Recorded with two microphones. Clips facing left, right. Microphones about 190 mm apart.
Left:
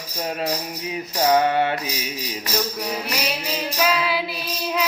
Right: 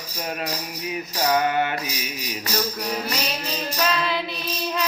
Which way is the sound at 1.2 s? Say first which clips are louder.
Left 3 dB; 25° left (ahead or behind).